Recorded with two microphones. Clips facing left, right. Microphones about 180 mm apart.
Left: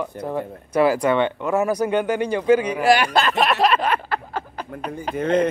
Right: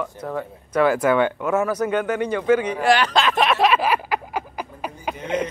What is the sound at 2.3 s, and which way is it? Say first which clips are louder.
Speech: left 2 dB; 30° left (ahead or behind).